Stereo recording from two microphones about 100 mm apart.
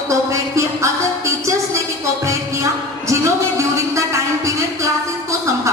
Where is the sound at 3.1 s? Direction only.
30° right (ahead or behind).